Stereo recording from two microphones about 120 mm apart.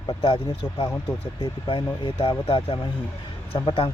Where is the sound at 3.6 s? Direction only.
50° left (ahead or behind).